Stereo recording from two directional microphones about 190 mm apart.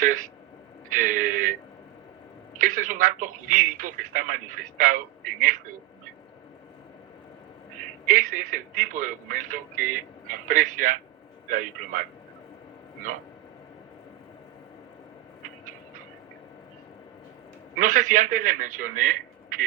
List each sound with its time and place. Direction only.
0.9 s a sound: 45° right (ahead or behind)
2.6 s speech: 45° right (ahead or behind)
8.0 s speech: 45° right (ahead or behind)
17.7 s a man's voice: 45° right (ahead or behind)